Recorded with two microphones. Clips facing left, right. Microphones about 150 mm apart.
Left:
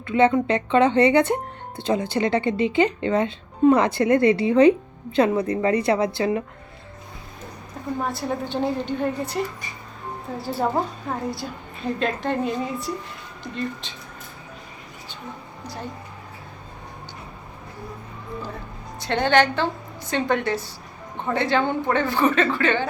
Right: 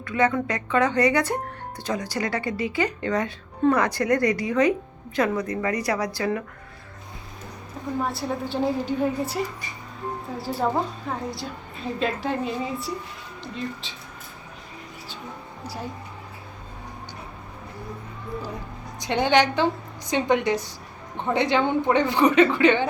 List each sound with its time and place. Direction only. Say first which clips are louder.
0.0 s speech: left 4 dB; 25° left (ahead or behind)
8.0 s a woman's voice: left 1 dB; centre (ahead or behind)
15.6 s a woman's voice: even; 10° right (ahead or behind)
18.9 s a woman's voice: left 1 dB; 15° right (ahead or behind)